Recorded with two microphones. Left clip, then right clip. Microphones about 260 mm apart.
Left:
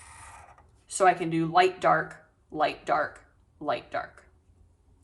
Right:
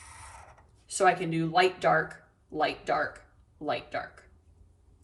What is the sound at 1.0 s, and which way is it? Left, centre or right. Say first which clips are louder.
A woman's voice: left 2 dB; centre.